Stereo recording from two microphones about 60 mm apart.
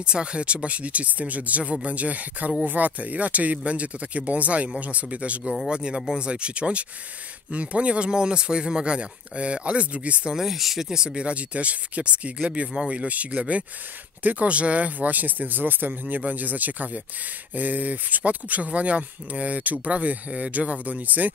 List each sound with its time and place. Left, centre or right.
0.0 s speech: centre
10.3 s speech: centre; by 21.3 s right